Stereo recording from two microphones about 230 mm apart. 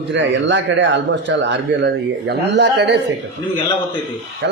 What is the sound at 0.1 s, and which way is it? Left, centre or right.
Speech, right.